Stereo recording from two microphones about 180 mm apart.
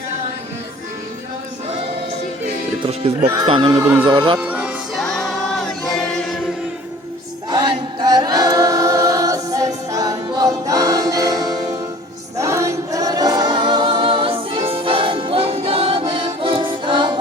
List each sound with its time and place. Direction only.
2.8 s music: 30° right (ahead or behind)
3.3 s choir: 25° right (ahead or behind)
4.4 s music: 5° right (ahead or behind)
7.5 s a capella: 25° right (ahead or behind)
12.4 s choir: 15° right (ahead or behind)